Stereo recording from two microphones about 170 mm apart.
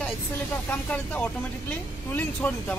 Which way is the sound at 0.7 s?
10° left (ahead or behind).